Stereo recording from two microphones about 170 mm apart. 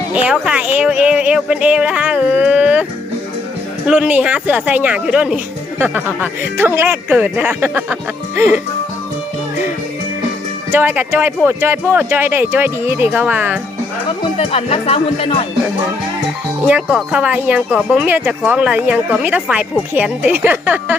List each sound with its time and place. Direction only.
0.1 s speech: 5° right (ahead or behind)
3.8 s speech: 5° right (ahead or behind)
6.6 s speech: 10° right (ahead or behind)
10.7 s speech: 10° right (ahead or behind)
14.2 s speech: 35° left (ahead or behind)
16.6 s speech: 5° right (ahead or behind)